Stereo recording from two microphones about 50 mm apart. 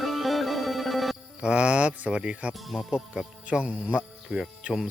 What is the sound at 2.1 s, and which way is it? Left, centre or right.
Speech, centre.